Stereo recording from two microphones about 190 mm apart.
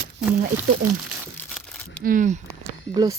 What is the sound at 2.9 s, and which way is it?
Speech, 20° right (ahead or behind).